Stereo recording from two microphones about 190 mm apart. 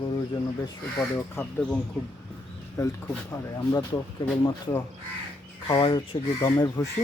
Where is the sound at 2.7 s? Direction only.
15° left (ahead or behind).